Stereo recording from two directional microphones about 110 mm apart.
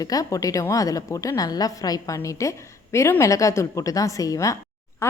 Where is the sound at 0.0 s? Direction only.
35° left (ahead or behind).